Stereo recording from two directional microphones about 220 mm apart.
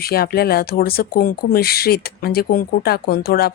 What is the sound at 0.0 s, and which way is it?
Speech, 45° left (ahead or behind).